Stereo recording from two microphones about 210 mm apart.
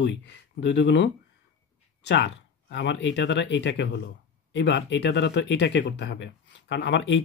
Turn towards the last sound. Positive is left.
turn(degrees=55)  # may be behind; listen again after turning